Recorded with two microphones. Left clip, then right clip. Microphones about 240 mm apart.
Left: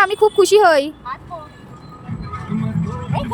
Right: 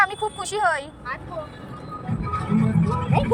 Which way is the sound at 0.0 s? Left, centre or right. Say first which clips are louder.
Left 9 dB; left.